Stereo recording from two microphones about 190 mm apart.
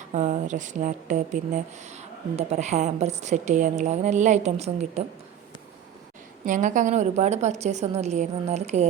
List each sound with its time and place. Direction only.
0.1 s speech: 40° right (ahead or behind)
6.4 s speech: 40° right (ahead or behind)